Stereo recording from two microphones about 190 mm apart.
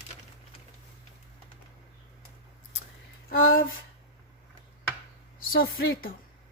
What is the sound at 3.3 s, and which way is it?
Speech, 50° left (ahead or behind).